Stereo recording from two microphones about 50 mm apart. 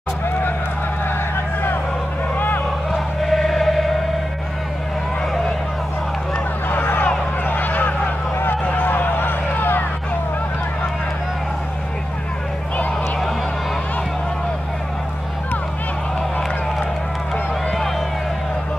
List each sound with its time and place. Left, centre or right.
2.3 s vehicle: left
2.9 s choir: centre
6.7 s a sound: left